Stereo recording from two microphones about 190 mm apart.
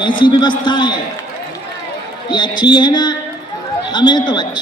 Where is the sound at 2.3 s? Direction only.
25° left (ahead or behind).